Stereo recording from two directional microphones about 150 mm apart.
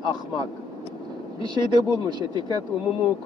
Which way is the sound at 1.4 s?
30° right (ahead or behind).